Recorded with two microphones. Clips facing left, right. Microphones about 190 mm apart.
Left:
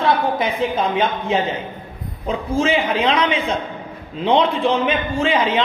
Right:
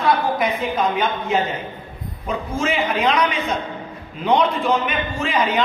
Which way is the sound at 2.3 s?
30° left (ahead or behind).